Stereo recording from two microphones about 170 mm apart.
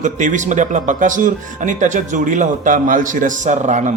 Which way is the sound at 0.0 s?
45° right (ahead or behind).